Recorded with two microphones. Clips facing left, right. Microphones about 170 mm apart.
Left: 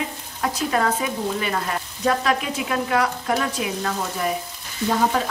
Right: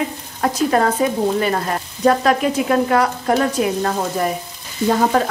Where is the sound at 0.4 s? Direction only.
45° right (ahead or behind).